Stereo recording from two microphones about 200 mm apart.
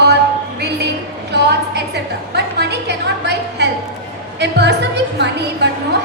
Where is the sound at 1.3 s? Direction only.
55° right (ahead or behind).